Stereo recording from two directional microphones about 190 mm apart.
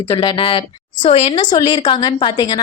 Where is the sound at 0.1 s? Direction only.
30° left (ahead or behind).